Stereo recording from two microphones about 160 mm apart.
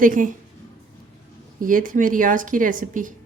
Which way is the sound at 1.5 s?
60° right (ahead or behind).